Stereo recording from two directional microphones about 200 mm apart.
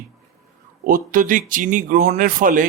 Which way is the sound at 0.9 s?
45° right (ahead or behind).